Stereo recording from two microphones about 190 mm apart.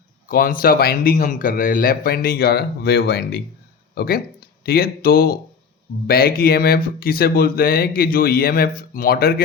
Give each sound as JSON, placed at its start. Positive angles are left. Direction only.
{"t": 0.3, "sound": "speech", "side_deg": 50}